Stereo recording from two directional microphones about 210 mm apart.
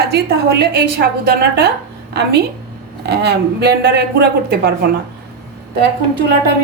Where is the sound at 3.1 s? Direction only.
50° right (ahead or behind).